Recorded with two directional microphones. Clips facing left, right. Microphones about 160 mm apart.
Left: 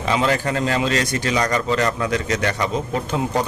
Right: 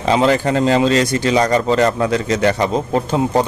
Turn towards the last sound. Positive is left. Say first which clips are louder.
# right 6 dB
turn(degrees=-30)  # may be behind; listen again after turning